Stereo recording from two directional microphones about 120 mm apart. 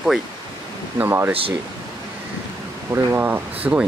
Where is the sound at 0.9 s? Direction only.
15° right (ahead or behind).